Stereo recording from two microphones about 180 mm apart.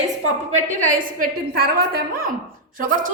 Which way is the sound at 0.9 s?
50° right (ahead or behind).